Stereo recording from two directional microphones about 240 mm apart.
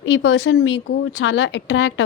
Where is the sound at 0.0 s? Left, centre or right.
Left.